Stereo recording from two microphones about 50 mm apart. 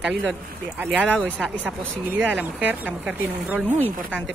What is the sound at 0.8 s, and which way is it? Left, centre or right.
Speech, right.